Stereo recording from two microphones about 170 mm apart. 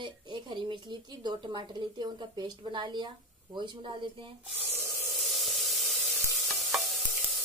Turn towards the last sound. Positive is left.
turn(degrees=0)  # may be behind; listen again after turning